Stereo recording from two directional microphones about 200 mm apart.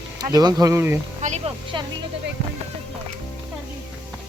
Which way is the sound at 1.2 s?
35° right (ahead or behind).